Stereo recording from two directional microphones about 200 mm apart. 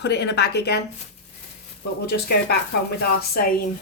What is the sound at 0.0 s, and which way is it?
Speech, 55° left (ahead or behind).